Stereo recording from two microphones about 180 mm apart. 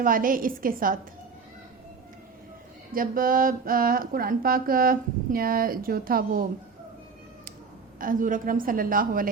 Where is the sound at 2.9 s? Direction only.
50° right (ahead or behind).